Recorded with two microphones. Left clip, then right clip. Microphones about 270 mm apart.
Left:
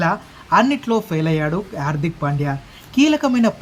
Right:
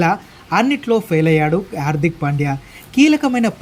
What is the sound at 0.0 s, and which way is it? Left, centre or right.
Speech, centre.